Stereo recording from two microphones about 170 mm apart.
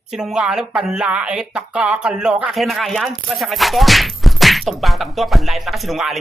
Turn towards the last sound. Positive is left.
turn(degrees=0)  # may be behind; listen again after turning